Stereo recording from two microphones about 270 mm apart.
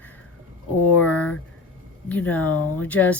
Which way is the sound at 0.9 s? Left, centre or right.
Centre.